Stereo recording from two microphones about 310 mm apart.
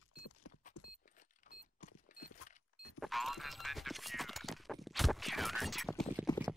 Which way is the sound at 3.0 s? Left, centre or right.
Centre.